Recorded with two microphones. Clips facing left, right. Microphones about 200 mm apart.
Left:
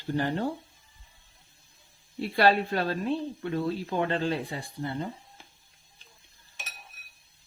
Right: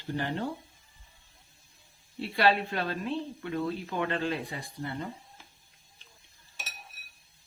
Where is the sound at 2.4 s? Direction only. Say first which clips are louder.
Left 3 dB; 40° left (ahead or behind).